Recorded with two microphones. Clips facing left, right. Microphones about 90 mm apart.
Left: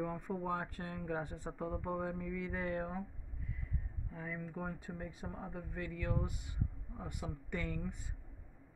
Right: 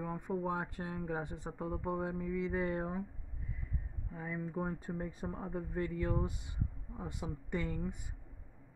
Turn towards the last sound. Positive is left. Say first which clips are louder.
# right 3 dB
turn(degrees=-20)  # may be behind; listen again after turning